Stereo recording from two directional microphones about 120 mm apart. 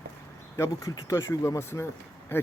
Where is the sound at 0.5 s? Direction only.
25° left (ahead or behind).